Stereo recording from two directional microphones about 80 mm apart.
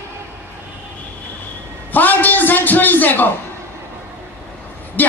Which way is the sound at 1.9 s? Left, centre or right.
Left.